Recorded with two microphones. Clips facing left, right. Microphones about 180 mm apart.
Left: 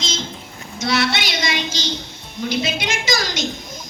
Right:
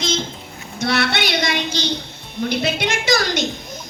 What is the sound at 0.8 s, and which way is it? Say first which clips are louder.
A woman's voice: right 1 dB; 60° right (ahead or behind).